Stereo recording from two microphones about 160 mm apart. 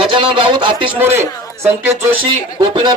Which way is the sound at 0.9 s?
15° right (ahead or behind).